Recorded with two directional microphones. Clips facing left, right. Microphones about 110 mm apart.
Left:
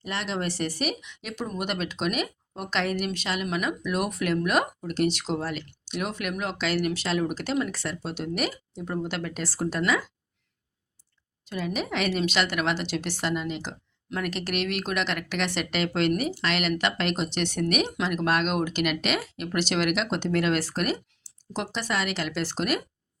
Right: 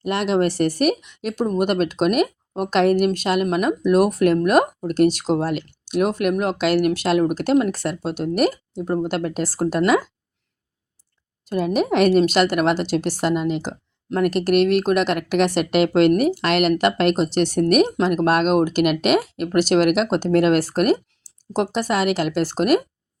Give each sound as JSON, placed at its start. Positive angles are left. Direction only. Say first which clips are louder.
{"t": 0.0, "sound": "a woman's voice", "louder": "right 11 dB", "side_deg": -50}
{"t": 11.4, "sound": "a woman's voice", "louder": "right 10 dB", "side_deg": -45}